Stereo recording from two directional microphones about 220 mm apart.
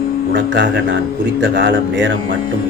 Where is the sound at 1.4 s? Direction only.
55° right (ahead or behind).